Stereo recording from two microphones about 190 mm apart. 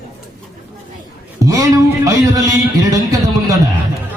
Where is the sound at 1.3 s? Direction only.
15° right (ahead or behind).